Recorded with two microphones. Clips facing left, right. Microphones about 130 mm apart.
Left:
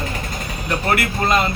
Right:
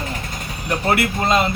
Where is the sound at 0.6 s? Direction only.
20° right (ahead or behind).